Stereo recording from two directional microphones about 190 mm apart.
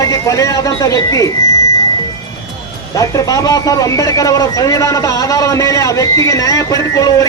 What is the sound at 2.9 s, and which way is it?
Speech, 15° left (ahead or behind).